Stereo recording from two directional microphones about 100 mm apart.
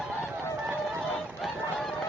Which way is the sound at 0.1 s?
15° right (ahead or behind).